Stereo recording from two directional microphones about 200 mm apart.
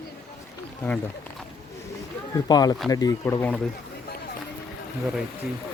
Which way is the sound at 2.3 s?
20° left (ahead or behind).